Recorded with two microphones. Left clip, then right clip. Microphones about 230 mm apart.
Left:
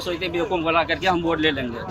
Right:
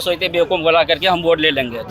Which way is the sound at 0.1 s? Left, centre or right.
Right.